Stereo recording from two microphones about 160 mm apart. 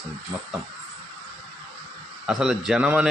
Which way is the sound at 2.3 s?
5° right (ahead or behind).